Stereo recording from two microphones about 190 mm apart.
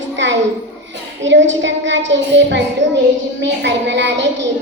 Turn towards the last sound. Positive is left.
turn(degrees=-70)  # may be behind; listen again after turning